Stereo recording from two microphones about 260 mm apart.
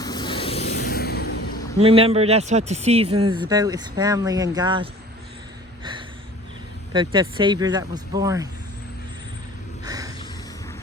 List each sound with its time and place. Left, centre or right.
0.0 s vehicle: centre
0.9 s vehicle: left
1.8 s speech: right
6.9 s speech: centre
9.8 s a sound: centre